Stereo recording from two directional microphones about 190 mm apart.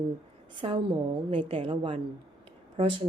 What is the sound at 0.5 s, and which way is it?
A woman's voice, 25° right (ahead or behind).